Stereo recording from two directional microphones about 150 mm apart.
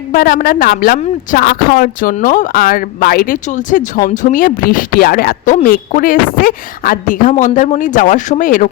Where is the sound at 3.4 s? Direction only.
55° left (ahead or behind).